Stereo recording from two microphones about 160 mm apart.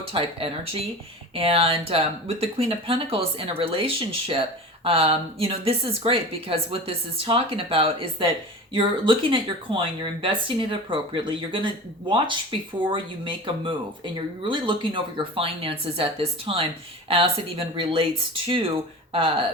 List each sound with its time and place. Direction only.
0.1 s speech: 35° right (ahead or behind)